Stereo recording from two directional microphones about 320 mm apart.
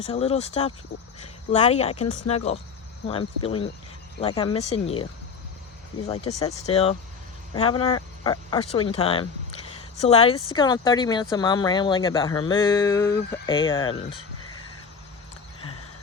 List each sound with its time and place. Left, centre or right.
0.0 s speech: centre
6.1 s speech: centre